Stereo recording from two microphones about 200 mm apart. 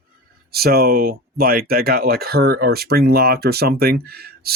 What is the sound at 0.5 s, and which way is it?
Speech, 50° right (ahead or behind).